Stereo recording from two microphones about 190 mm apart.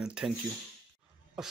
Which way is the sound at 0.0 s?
5° right (ahead or behind).